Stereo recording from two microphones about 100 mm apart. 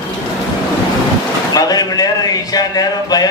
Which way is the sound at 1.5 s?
40° left (ahead or behind).